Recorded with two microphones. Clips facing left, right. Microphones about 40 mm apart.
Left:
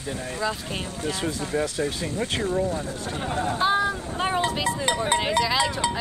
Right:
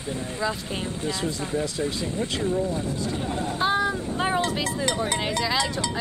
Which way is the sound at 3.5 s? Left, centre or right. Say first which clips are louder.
Even; centre.